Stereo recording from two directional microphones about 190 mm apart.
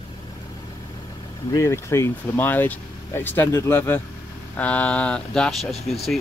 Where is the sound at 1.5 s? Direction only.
15° left (ahead or behind).